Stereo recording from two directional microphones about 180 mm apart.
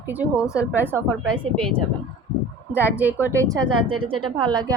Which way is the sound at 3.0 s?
10° right (ahead or behind).